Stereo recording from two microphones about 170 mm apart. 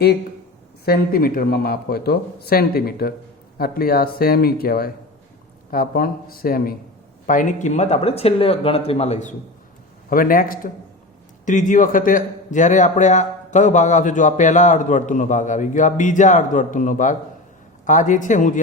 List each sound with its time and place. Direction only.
0.9 s speech: 60° left (ahead or behind); by 9.3 s 40° left (ahead or behind)
10.1 s a man's voice: 55° left (ahead or behind)